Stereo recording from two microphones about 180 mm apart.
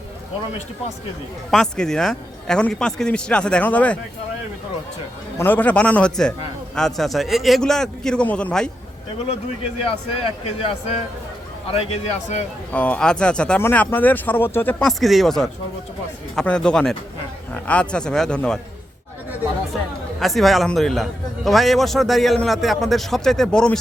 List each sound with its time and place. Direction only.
1.5 s a man's voice: 5° left (ahead or behind)
5.4 s a man's voice: 10° left (ahead or behind)
9.8 s speech: 30° left (ahead or behind)
12.7 s a man's voice: 5° left (ahead or behind)
20.1 s a man's voice: centre (ahead or behind)